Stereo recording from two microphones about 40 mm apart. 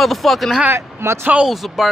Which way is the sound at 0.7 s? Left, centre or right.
Right.